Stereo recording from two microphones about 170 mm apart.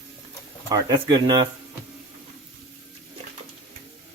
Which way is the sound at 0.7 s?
20° right (ahead or behind).